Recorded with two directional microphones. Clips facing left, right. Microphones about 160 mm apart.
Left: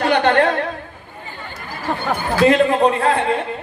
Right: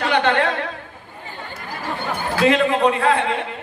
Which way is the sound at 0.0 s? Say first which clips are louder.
Left 3 dB; 50° left (ahead or behind).